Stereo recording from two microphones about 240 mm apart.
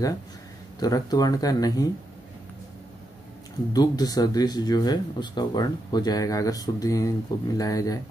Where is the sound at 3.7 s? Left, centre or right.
Centre.